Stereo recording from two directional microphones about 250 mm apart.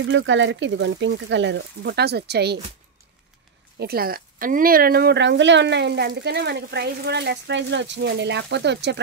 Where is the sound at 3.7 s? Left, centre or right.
Right.